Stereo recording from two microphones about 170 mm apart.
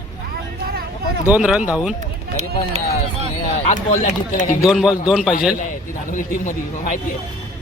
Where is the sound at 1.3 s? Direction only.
5° right (ahead or behind).